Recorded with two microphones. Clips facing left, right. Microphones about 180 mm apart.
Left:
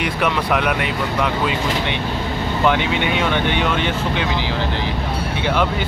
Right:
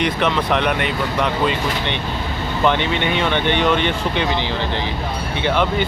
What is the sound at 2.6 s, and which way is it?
Speech, 5° left (ahead or behind).